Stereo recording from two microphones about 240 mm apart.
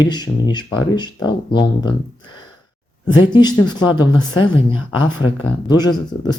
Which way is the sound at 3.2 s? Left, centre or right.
Centre.